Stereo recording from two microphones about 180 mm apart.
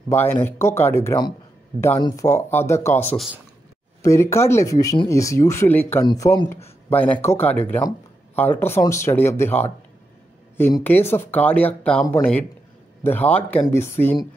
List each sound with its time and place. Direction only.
0.1 s speech: 10° left (ahead or behind)
6.0 s speech: 20° left (ahead or behind)
10.8 s speech: 10° left (ahead or behind)